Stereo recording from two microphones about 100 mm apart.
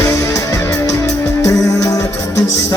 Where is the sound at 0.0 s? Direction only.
30° left (ahead or behind).